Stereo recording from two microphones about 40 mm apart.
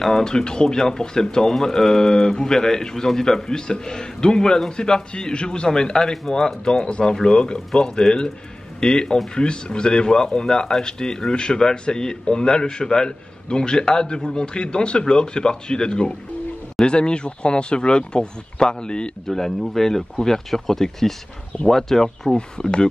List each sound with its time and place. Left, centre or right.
0.0 s speech: centre
6.9 s speech: left
19.2 s speech: centre
22.6 s speech: left